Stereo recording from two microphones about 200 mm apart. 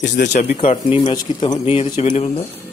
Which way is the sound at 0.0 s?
60° left (ahead or behind).